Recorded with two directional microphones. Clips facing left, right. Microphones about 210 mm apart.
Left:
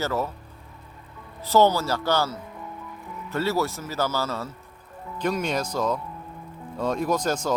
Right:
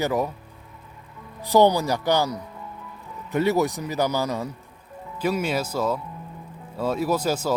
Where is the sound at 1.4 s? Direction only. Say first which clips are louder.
Right 2 dB; 15° right (ahead or behind).